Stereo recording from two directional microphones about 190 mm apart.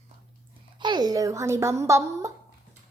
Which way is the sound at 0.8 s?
20° right (ahead or behind).